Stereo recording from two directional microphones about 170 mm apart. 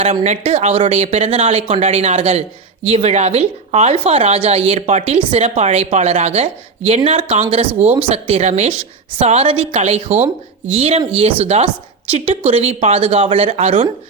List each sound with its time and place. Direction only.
0.0 s a woman's voice: 35° right (ahead or behind)